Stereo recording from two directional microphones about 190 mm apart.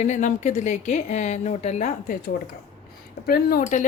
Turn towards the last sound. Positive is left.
turn(degrees=45)  # may be behind; listen again after turning